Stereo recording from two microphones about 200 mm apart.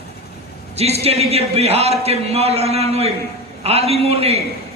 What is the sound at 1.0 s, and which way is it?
A man's voice, 30° right (ahead or behind).